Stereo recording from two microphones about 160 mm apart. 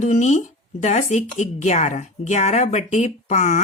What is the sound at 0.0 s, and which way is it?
Speech, 50° left (ahead or behind).